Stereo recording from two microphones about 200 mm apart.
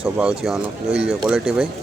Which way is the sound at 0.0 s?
5° right (ahead or behind).